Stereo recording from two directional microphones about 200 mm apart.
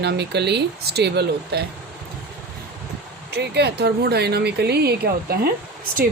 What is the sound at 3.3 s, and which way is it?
Speech, 55° right (ahead or behind).